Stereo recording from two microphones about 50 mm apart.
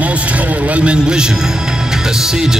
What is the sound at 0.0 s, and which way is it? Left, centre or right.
Music, right.